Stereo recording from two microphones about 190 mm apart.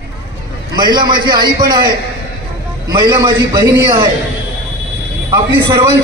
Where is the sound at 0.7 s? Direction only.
25° right (ahead or behind).